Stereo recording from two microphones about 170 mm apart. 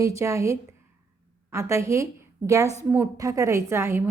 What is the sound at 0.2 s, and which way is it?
A woman's voice, 15° right (ahead or behind).